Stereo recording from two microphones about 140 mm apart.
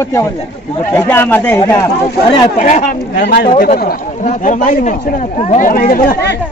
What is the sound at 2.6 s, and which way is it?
Speech, 65° left (ahead or behind).